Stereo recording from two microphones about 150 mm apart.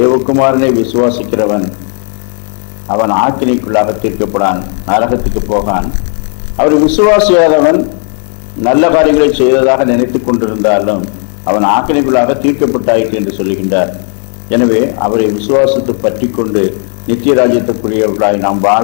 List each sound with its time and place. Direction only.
0.1 s a man's voice: 20° left (ahead or behind)
2.9 s a man's voice: 15° left (ahead or behind)